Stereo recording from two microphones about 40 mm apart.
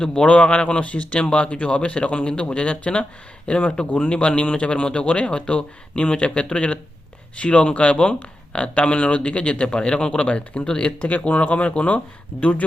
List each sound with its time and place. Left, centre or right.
0.0 s speech: left